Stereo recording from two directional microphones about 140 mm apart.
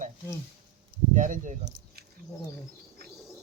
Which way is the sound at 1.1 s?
65° right (ahead or behind).